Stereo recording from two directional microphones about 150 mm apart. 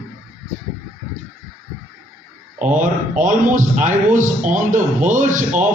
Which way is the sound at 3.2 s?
60° right (ahead or behind).